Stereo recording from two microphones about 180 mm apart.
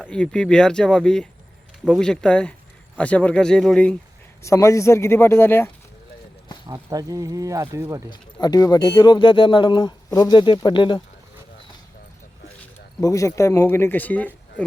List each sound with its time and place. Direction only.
0.0 s speech: 5° left (ahead or behind)
4.4 s speech: 15° left (ahead or behind)
6.7 s speech: 20° right (ahead or behind)
8.1 s speech: 20° left (ahead or behind)
13.0 s speech: 15° left (ahead or behind)